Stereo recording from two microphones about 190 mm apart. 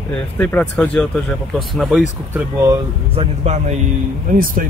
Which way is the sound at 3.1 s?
35° right (ahead or behind).